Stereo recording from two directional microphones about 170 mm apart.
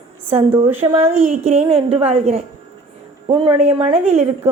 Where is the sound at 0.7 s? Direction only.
40° right (ahead or behind).